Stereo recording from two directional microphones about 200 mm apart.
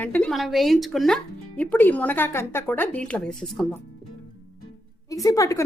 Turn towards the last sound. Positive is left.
turn(degrees=15)  # may be behind; listen again after turning